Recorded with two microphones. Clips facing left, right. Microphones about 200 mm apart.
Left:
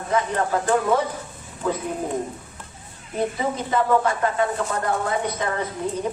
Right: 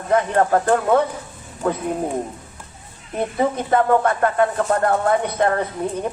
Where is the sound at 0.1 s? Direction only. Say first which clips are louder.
Right 6 dB; 55° right (ahead or behind).